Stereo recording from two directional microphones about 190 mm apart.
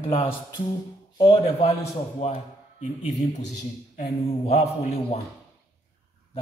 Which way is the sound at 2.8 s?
40° left (ahead or behind).